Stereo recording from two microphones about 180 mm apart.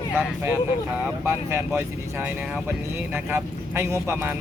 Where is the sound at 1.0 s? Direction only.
10° right (ahead or behind).